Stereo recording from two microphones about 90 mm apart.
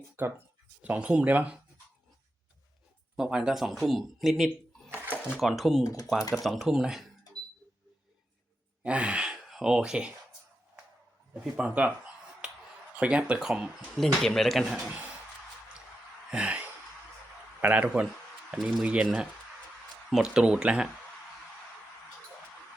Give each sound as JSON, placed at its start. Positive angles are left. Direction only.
{"t": 0.2, "sound": "speech", "side_deg": -25}
{"t": 0.8, "sound": "speech", "side_deg": -15}
{"t": 3.2, "sound": "speech", "side_deg": -5}
{"t": 5.8, "sound": "speech", "side_deg": 40}
{"t": 6.4, "sound": "speech", "side_deg": 0}
{"t": 8.8, "sound": "speech", "side_deg": -15}
{"t": 11.3, "sound": "speech", "side_deg": -15}
{"t": 12.4, "sound": "a sound", "side_deg": -10}
{"t": 13.0, "sound": "speech", "side_deg": -15}
{"t": 14.0, "sound": "speech", "side_deg": 5}
{"t": 16.3, "sound": "a sound", "side_deg": -15}
{"t": 17.6, "sound": "speech", "side_deg": -15}